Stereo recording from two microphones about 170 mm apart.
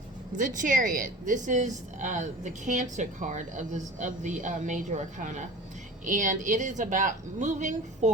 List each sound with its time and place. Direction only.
0.3 s a woman's voice: 50° right (ahead or behind)